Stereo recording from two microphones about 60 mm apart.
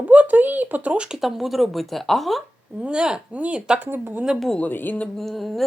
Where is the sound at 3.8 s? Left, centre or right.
Right.